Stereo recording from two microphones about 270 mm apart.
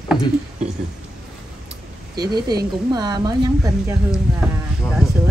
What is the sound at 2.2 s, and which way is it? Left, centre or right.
A woman's voice, centre.